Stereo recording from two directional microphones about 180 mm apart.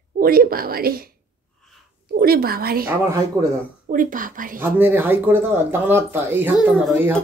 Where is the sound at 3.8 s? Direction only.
50° right (ahead or behind).